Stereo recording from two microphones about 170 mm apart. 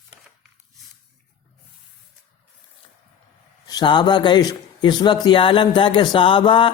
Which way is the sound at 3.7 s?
25° left (ahead or behind).